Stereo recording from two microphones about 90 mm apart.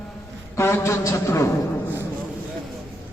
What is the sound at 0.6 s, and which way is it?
Speech, 30° left (ahead or behind).